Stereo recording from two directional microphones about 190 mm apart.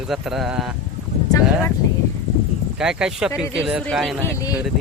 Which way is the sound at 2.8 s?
5° right (ahead or behind).